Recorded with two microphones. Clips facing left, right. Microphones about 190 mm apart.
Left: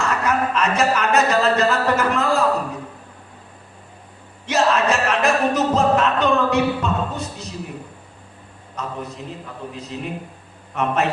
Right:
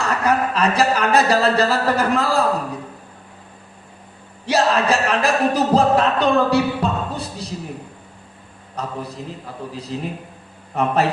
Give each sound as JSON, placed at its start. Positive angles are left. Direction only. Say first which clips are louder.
{"t": 0.0, "sound": "a sound", "louder": "right 2 dB", "side_deg": -35}
{"t": 4.4, "sound": "music", "louder": "right 1 dB", "side_deg": -35}
{"t": 8.7, "sound": "a man's voice", "louder": "right 1 dB", "side_deg": -35}